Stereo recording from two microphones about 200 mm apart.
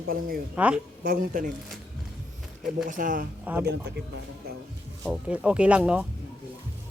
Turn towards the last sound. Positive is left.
turn(degrees=-5)  # may be behind; listen again after turning